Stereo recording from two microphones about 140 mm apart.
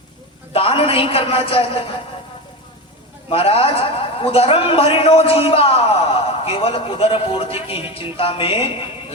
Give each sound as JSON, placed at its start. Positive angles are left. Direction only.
{"t": 0.5, "sound": "a man's voice", "side_deg": 45}
{"t": 3.2, "sound": "a man's voice", "side_deg": 40}